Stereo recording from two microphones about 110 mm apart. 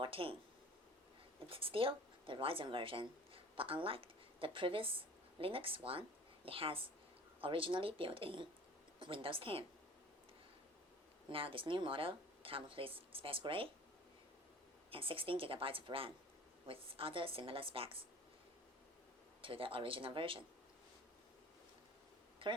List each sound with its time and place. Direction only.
0.0 s speech: 55° right (ahead or behind)
1.5 s a woman's voice: 55° right (ahead or behind)
11.3 s speech: 55° right (ahead or behind)
14.8 s speech: 55° right (ahead or behind)
19.4 s speech: 55° right (ahead or behind)
22.4 s speech: 50° right (ahead or behind)